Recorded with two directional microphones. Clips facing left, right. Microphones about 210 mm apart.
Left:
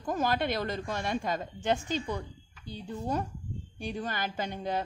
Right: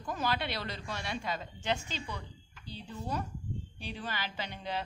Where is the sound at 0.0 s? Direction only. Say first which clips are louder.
Left 5 dB; 45° left (ahead or behind).